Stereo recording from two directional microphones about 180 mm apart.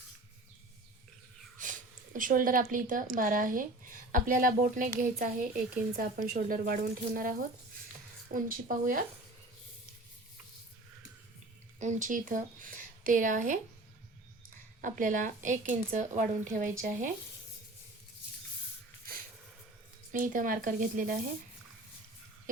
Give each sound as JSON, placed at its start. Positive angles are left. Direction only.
{"t": 1.6, "sound": "a sound", "side_deg": -45}
{"t": 2.1, "sound": "speech", "side_deg": -50}
{"t": 11.8, "sound": "speech", "side_deg": -45}
{"t": 14.8, "sound": "speech", "side_deg": -45}
{"t": 20.1, "sound": "speech", "side_deg": -45}